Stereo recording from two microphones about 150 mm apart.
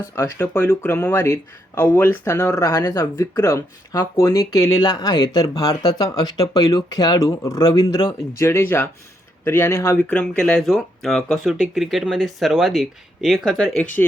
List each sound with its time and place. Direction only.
0.2 s speech: 15° left (ahead or behind); by 13.8 s centre (ahead or behind)